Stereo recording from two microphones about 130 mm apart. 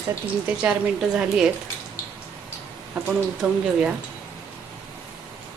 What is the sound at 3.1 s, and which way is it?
Speech, 5° right (ahead or behind).